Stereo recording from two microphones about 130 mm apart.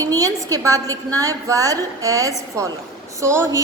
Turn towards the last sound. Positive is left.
turn(degrees=-20)  # may be behind; listen again after turning